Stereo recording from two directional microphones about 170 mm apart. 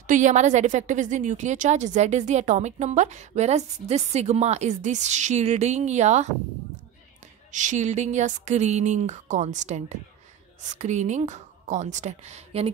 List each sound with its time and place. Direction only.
0.0 s a woman's voice: 45° right (ahead or behind)
7.5 s a woman's voice: 45° right (ahead or behind)